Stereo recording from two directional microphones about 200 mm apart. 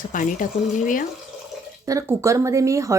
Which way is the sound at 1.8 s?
15° right (ahead or behind).